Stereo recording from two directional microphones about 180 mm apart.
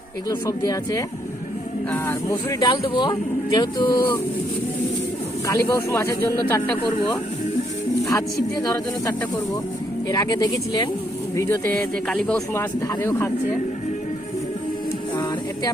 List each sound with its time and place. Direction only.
0.3 s speech: 20° left (ahead or behind)
5.5 s speech: 15° left (ahead or behind)
10.1 s speech: 20° left (ahead or behind)
12.0 s speech: 5° left (ahead or behind)
12.5 s speech: 15° left (ahead or behind)